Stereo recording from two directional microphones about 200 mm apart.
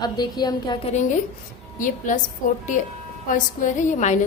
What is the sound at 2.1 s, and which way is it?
Speech, 40° left (ahead or behind).